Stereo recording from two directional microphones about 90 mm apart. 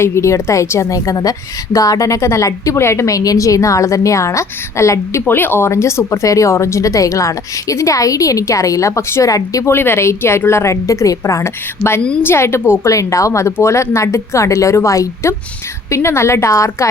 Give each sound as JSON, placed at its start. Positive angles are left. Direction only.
{"t": 0.0, "sound": "a woman's voice", "side_deg": 30}
{"t": 5.2, "sound": "a woman's voice", "side_deg": 25}
{"t": 9.7, "sound": "a woman's voice", "side_deg": 25}